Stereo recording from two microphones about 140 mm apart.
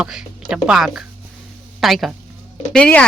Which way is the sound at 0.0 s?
5° right (ahead or behind).